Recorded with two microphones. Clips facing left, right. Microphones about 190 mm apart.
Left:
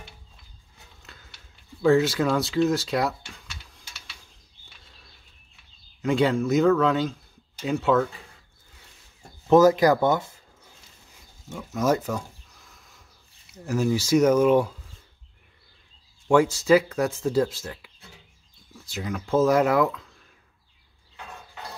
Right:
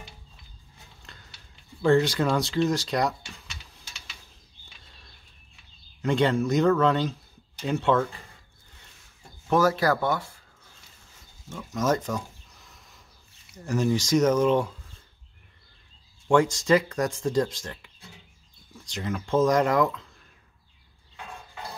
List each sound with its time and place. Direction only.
1.0 s a sound: 5° left (ahead or behind)
1.8 s speech: centre (ahead or behind)
6.0 s speech: 5° left (ahead or behind)
9.5 s speech: 20° left (ahead or behind)
11.4 s a sound: 10° left (ahead or behind)
13.7 s speech: 5° left (ahead or behind)
16.3 s speech: 5° left (ahead or behind)